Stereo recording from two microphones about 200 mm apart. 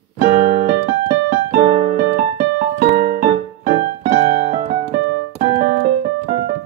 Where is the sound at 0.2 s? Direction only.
50° right (ahead or behind).